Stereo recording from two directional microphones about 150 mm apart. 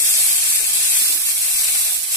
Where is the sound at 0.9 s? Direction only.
20° left (ahead or behind).